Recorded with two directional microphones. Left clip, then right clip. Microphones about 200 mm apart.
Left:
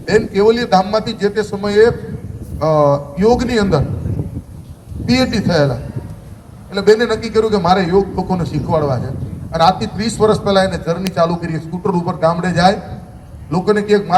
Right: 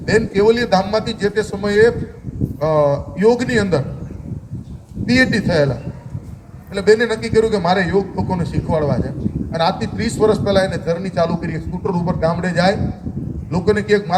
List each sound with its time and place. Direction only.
0.0 s a man's voice: 20° right (ahead or behind)
5.0 s a man's voice: 15° right (ahead or behind)
6.7 s a man's voice: 15° right (ahead or behind)